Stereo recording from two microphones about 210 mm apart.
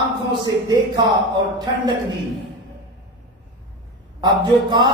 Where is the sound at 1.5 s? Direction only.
20° right (ahead or behind).